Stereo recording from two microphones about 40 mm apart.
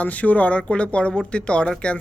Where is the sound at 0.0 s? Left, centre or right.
Left.